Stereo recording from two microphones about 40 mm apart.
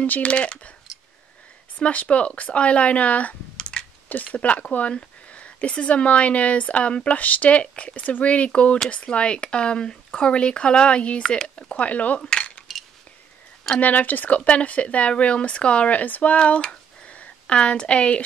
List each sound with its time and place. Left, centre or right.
0.2 s speech: left
1.8 s speech: left
3.5 s a sound: left
4.1 s speech: left
7.2 s speech: left
12.2 s cutlery: left
13.7 s speech: left
14.4 s speech: left
16.3 s speech: left